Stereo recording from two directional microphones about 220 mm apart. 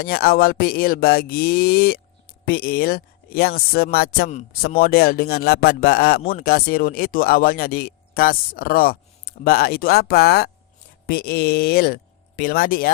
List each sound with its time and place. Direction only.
0.0 s speech: 45° left (ahead or behind)